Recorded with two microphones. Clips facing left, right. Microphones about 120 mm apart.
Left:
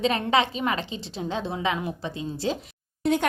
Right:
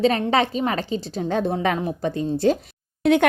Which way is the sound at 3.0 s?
70° right (ahead or behind).